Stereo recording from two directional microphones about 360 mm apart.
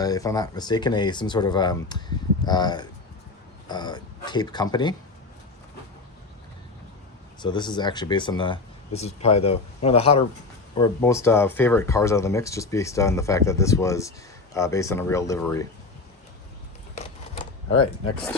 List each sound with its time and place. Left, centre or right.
0.0 s speech: centre
7.3 s speech: centre